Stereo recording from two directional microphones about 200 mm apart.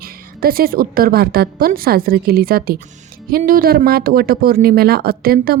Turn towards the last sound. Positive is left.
turn(degrees=-50)  # may be behind; listen again after turning